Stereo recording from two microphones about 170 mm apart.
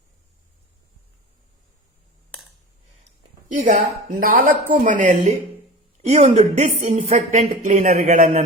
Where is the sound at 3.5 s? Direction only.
55° right (ahead or behind).